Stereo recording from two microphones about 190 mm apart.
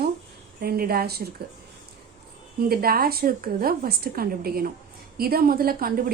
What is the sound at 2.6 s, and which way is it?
A woman's voice, 55° right (ahead or behind).